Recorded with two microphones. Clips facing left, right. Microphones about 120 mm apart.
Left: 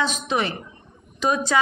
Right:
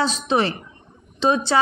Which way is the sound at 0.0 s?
35° right (ahead or behind).